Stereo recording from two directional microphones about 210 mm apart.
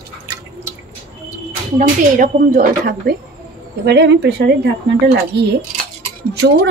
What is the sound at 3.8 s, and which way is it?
Speech, 55° right (ahead or behind).